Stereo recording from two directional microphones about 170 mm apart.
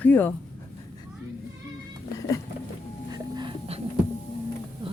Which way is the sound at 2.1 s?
20° left (ahead or behind).